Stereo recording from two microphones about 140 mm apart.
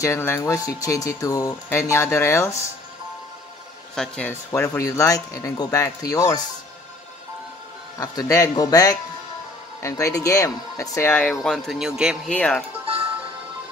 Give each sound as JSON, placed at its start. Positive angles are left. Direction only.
{"t": 0.0, "sound": "speech", "side_deg": 20}
{"t": 3.9, "sound": "speech", "side_deg": 5}
{"t": 4.3, "sound": "speech", "side_deg": 20}
{"t": 8.0, "sound": "speech", "side_deg": 25}
{"t": 11.4, "sound": "speech", "side_deg": 5}
{"t": 12.3, "sound": "speech", "side_deg": 10}